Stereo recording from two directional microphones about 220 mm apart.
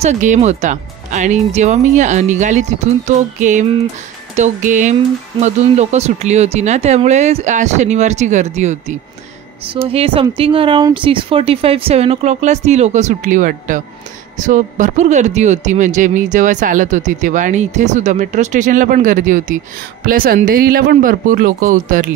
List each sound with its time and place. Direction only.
0.0 s speech: 30° right (ahead or behind)